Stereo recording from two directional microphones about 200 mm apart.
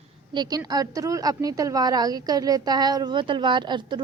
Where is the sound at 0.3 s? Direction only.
20° right (ahead or behind).